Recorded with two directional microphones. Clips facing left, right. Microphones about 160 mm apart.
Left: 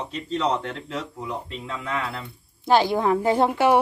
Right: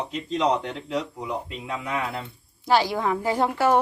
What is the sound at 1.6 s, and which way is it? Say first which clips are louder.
Speech: even; 20° right (ahead or behind).